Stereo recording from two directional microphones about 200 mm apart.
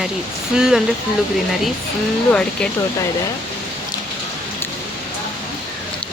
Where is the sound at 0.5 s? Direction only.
5° right (ahead or behind).